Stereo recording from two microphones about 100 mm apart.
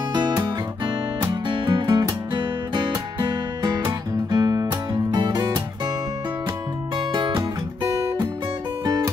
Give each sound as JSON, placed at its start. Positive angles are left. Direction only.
{"t": 0.1, "sound": "music", "side_deg": -50}
{"t": 3.2, "sound": "music", "side_deg": -45}
{"t": 7.0, "sound": "music", "side_deg": -50}
{"t": 8.8, "sound": "music", "side_deg": -35}